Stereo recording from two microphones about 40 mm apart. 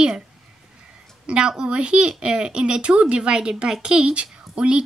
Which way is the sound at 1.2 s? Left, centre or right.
Right.